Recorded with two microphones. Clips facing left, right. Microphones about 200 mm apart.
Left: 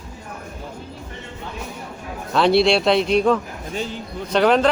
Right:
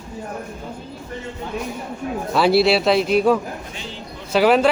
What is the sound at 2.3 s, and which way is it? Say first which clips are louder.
Speech: even; 5° right (ahead or behind).